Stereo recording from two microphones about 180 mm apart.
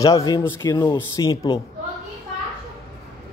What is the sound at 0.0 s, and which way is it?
Speech, 20° left (ahead or behind).